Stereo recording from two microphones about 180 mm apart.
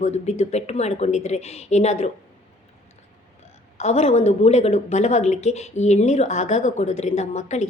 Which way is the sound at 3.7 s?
35° left (ahead or behind).